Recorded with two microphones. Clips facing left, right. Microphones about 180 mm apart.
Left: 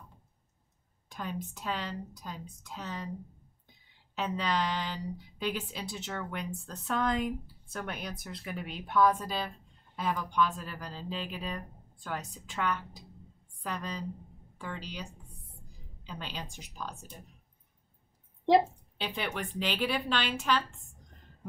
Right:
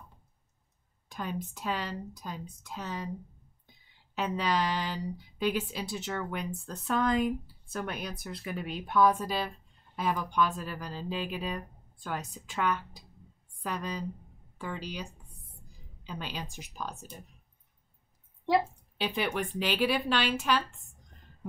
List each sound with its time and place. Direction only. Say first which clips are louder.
1.0 s speech: right 2 dB; 5° right (ahead or behind)
4.1 s a woman's voice: right 2 dB; 5° right (ahead or behind)
16.2 s speech: right 2 dB; 5° right (ahead or behind)
18.4 s a sound: left 3 dB; 25° left (ahead or behind)
18.9 s a woman's voice: right 4 dB; 5° right (ahead or behind)